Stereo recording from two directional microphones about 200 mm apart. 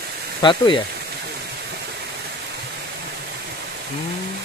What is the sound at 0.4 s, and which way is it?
Speech, 25° left (ahead or behind).